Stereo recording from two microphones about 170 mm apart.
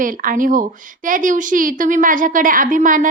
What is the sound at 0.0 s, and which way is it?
A woman's voice, 55° right (ahead or behind).